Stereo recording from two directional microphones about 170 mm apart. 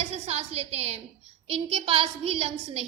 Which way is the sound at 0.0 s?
35° right (ahead or behind).